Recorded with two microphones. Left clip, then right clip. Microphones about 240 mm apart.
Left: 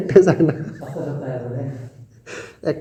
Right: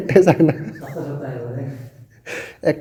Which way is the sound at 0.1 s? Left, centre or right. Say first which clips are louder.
Even; right.